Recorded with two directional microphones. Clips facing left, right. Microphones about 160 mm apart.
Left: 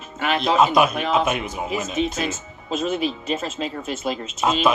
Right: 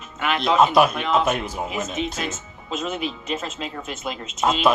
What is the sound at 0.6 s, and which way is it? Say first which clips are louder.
Speech: right 1 dB; centre (ahead or behind).